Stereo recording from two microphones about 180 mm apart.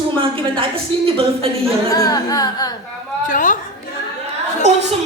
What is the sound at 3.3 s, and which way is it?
Speech, 45° left (ahead or behind).